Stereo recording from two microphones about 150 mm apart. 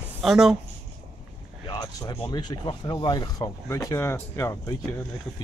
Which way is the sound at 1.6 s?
25° left (ahead or behind).